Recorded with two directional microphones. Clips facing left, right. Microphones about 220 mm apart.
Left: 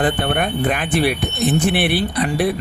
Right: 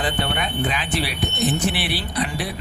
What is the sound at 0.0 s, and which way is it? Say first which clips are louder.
Speech: left 6 dB; 55° left (ahead or behind).